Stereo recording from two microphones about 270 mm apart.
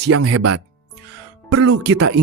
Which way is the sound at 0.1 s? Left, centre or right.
Right.